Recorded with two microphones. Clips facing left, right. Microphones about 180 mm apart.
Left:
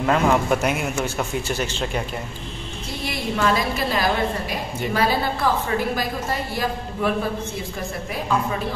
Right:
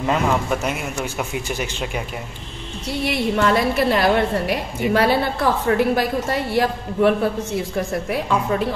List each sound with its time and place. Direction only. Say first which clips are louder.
0.0 s a man's voice: left 1 dB; centre (ahead or behind)
1.0 s speech: left 1 dB; 10° right (ahead or behind)
2.9 s a woman's voice: right 6 dB; 70° right (ahead or behind)